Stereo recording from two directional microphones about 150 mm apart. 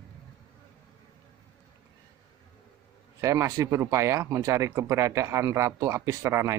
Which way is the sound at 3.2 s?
20° right (ahead or behind).